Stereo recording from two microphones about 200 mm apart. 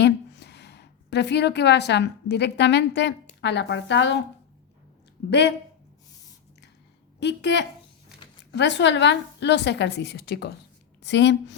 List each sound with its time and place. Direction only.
0.0 s a woman's voice: 60° left (ahead or behind)
5.3 s a woman's voice: 60° left (ahead or behind)
7.2 s a woman's voice: 60° left (ahead or behind)